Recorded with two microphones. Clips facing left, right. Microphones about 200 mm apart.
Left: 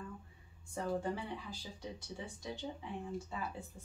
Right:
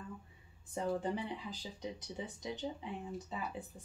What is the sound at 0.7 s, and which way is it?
Speech, 20° right (ahead or behind).